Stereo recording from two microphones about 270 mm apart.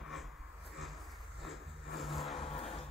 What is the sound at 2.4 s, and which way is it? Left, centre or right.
Vehicle, left.